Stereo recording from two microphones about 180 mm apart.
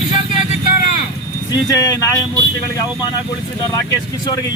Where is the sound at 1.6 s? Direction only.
20° left (ahead or behind).